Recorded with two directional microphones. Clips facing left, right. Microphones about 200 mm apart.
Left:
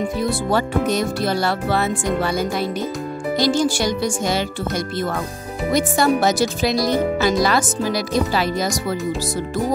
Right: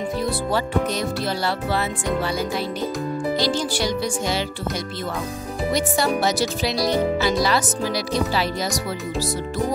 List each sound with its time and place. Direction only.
0.5 s speech: 50° left (ahead or behind)
5.7 s speech: 50° left (ahead or behind)